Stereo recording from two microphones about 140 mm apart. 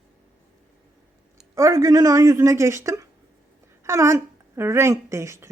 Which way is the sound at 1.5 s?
25° right (ahead or behind).